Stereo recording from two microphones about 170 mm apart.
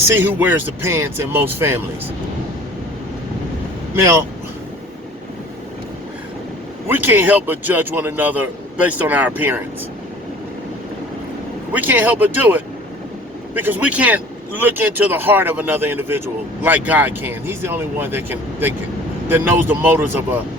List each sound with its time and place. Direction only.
0.1 s speech: 10° right (ahead or behind)
3.9 s speech: 15° right (ahead or behind)
6.8 s speech: 10° right (ahead or behind)
11.7 s speech: 10° right (ahead or behind)